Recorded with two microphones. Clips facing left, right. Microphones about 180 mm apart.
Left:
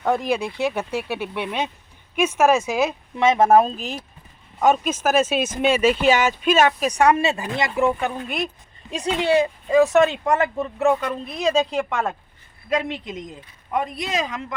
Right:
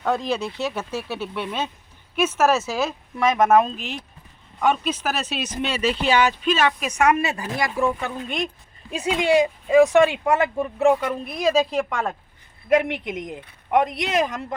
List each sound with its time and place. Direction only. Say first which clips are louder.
0.0 s speech: left 2 dB; 15° left (ahead or behind)
8.9 s speech: even; 5° right (ahead or behind)
12.6 s speech: right 4 dB; 60° right (ahead or behind)